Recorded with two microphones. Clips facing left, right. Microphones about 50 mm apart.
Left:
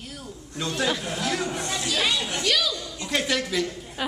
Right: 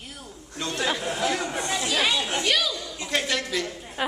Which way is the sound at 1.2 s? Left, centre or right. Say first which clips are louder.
Right 1 dB; centre.